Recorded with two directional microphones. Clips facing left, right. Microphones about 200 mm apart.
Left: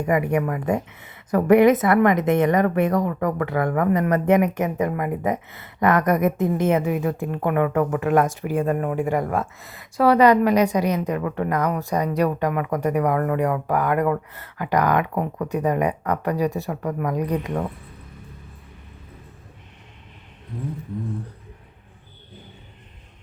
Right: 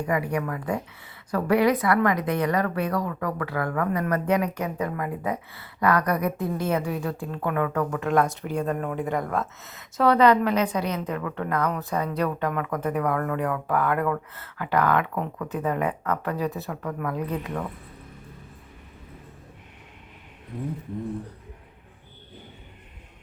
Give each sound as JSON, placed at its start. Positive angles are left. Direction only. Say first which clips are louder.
{"t": 0.0, "sound": "speech", "louder": "left 5 dB", "side_deg": 20}
{"t": 9.6, "sound": "speech", "louder": "left 4 dB", "side_deg": 0}